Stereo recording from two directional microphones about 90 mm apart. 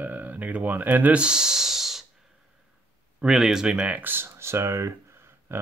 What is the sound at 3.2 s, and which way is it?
Speech, 5° right (ahead or behind).